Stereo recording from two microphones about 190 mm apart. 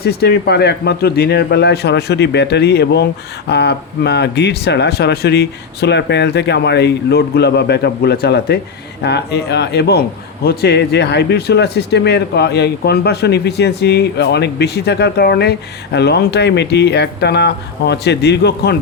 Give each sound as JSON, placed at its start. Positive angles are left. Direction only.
{"t": 0.0, "sound": "speech", "side_deg": 60}